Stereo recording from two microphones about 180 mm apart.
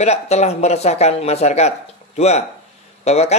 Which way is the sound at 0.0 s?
35° left (ahead or behind).